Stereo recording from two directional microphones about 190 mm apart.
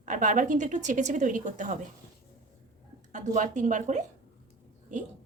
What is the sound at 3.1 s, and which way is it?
Speech, 40° right (ahead or behind).